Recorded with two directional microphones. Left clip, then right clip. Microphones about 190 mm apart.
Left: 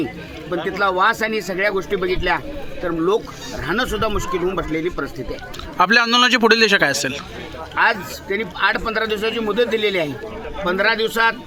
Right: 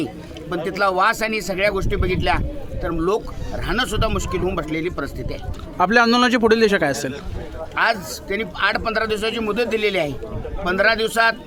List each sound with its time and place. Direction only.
0.5 s speech: 30° right (ahead or behind)
5.7 s a man's voice: 5° right (ahead or behind)
7.8 s speech: 30° right (ahead or behind)